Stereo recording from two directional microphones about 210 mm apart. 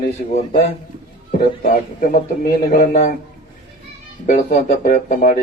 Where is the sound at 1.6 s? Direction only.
40° left (ahead or behind).